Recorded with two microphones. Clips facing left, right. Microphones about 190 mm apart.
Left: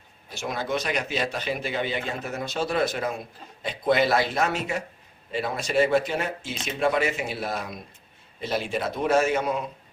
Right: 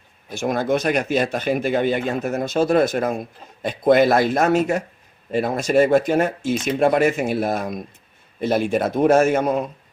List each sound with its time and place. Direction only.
0.3 s speech: 50° right (ahead or behind)